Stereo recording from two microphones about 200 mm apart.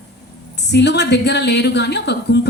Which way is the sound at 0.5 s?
60° left (ahead or behind).